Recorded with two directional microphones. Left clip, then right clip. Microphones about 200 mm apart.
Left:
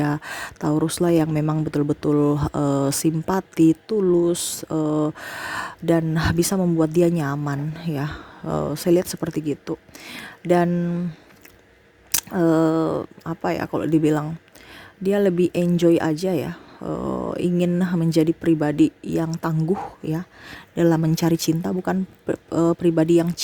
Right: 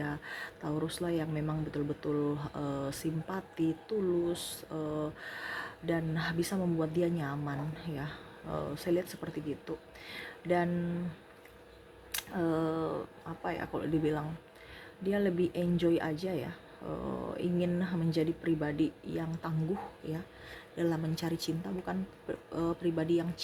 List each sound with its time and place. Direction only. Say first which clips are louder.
0.0 s speech: left 13 dB; 60° left (ahead or behind)
12.1 s speech: left 14 dB; 60° left (ahead or behind)